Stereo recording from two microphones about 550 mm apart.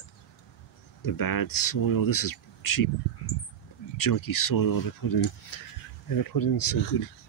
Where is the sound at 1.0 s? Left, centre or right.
Left.